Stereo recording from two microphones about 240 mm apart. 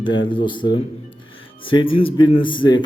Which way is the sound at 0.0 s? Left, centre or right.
Left.